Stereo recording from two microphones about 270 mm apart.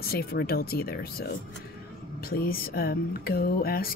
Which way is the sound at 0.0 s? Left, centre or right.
Left.